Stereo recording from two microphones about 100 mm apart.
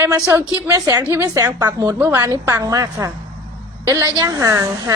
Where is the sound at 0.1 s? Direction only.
30° right (ahead or behind).